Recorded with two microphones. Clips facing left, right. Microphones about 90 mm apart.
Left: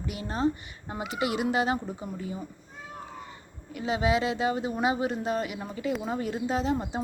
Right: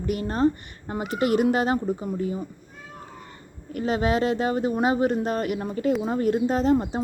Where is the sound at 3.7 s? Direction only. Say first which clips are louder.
Right 3 dB; 50° right (ahead or behind).